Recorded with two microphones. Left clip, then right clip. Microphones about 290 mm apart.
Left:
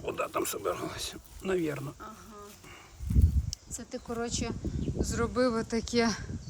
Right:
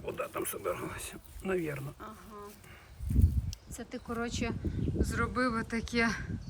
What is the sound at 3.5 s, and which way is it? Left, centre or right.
Speech, centre.